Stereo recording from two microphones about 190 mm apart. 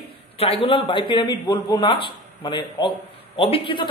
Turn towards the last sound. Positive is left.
turn(degrees=30)  # may be behind; listen again after turning